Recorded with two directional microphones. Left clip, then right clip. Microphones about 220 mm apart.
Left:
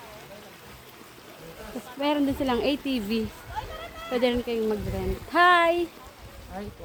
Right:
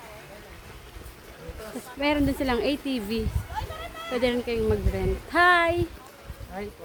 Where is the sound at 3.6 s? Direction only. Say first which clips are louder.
Right 1 dB; 15° right (ahead or behind).